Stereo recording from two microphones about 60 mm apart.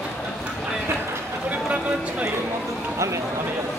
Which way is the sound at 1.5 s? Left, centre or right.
Right.